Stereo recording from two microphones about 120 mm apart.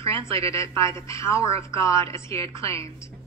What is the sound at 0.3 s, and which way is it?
A woman's voice, 25° left (ahead or behind).